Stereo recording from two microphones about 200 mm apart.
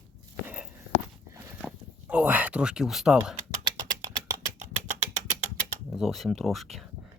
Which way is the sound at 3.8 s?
20° right (ahead or behind).